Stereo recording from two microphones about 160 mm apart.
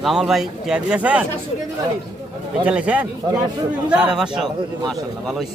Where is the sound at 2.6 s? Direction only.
5° right (ahead or behind).